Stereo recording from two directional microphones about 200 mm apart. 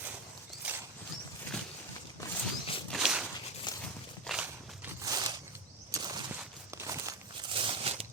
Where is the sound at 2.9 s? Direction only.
5° right (ahead or behind).